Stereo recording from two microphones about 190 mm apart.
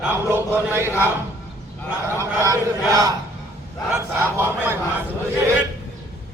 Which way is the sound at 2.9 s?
20° right (ahead or behind).